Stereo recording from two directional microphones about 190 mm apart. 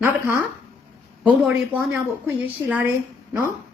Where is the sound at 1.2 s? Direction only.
10° right (ahead or behind).